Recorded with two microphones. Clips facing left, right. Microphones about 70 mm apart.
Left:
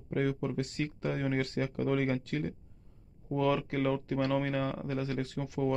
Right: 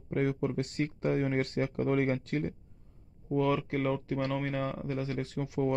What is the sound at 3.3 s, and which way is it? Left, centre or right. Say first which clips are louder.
Speech: right 1 dB; centre.